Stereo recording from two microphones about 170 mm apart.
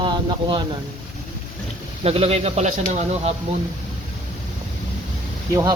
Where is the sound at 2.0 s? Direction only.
35° right (ahead or behind).